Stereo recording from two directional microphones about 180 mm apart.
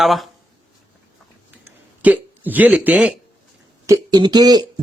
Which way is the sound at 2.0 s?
10° right (ahead or behind).